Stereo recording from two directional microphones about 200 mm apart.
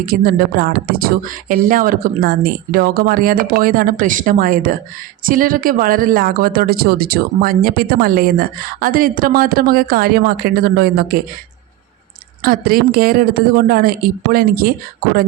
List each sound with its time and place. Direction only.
0.0 s speech: 45° right (ahead or behind)
12.4 s speech: 45° right (ahead or behind)